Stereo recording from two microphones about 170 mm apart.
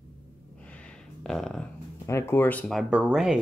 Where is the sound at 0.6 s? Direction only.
10° left (ahead or behind).